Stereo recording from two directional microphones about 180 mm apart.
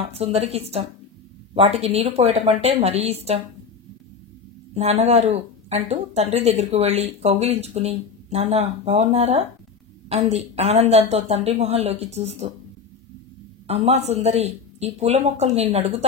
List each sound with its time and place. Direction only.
0.1 s speech: 35° right (ahead or behind)
4.7 s speech: 35° right (ahead or behind)
13.7 s speech: 35° right (ahead or behind)